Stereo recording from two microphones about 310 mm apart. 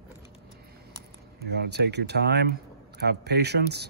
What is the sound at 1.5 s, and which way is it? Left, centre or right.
Speech, right.